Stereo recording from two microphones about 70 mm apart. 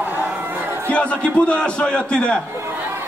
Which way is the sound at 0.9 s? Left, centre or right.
Centre.